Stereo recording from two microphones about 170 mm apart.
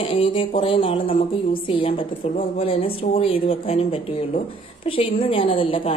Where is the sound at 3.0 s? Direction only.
35° left (ahead or behind).